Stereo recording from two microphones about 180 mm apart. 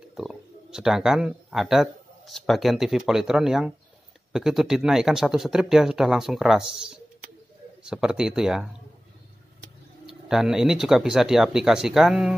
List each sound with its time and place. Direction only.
0.1 s speech: 5° right (ahead or behind)
10.0 s speech: 5° right (ahead or behind)